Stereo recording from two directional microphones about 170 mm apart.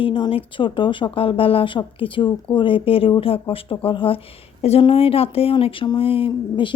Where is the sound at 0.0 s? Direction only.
30° left (ahead or behind).